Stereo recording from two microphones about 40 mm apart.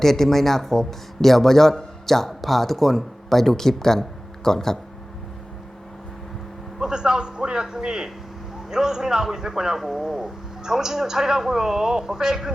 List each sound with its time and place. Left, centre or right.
0.0 s a man's voice: centre
6.7 s a man's voice: centre